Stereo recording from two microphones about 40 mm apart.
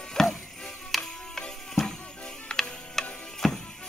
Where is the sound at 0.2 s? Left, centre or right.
Centre.